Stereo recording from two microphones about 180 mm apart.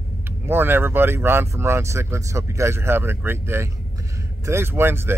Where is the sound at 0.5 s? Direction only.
10° right (ahead or behind).